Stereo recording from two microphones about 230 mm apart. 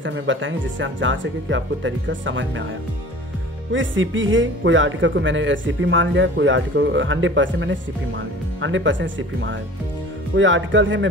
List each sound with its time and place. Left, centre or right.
0.0 s speech: right
3.7 s speech: right